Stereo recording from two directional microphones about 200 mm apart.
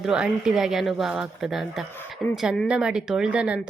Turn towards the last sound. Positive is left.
turn(degrees=-5)  # may be behind; listen again after turning